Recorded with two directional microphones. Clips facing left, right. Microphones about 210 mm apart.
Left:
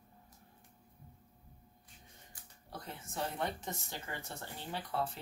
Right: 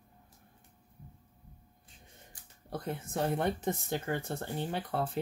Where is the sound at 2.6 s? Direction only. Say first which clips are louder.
Right 10 dB; 55° right (ahead or behind).